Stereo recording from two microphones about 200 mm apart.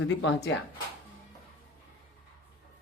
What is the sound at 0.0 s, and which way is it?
Speech, 70° left (ahead or behind).